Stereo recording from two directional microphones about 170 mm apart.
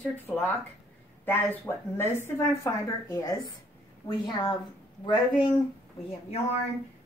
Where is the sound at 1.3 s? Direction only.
10° left (ahead or behind); by 5.5 s 30° left (ahead or behind).